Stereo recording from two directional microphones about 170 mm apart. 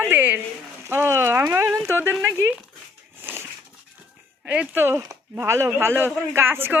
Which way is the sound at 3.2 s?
10° right (ahead or behind).